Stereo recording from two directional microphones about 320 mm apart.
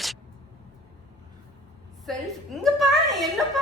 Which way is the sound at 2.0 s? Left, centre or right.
Centre.